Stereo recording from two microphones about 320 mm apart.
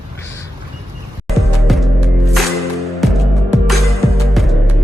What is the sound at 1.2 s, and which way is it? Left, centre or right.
Music, centre.